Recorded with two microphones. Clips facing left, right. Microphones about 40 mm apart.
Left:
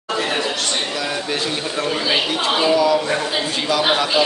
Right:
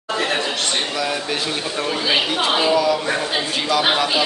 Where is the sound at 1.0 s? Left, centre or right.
Centre.